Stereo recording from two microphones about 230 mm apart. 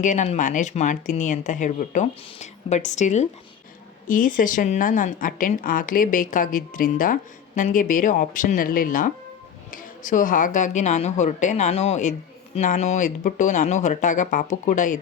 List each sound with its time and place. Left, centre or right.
0.0 s a woman's voice: left